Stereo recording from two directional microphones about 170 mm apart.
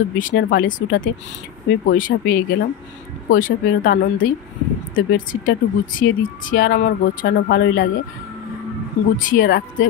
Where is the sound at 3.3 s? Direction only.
55° left (ahead or behind).